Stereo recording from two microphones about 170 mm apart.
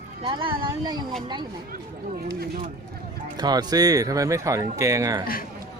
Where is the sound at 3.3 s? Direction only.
25° right (ahead or behind).